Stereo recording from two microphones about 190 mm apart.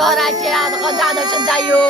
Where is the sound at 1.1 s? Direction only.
20° right (ahead or behind).